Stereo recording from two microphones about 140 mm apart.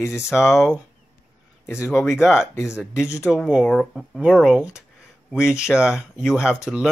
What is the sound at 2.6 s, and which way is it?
Speech, 20° left (ahead or behind).